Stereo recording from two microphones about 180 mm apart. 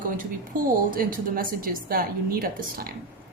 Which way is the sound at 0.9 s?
50° right (ahead or behind).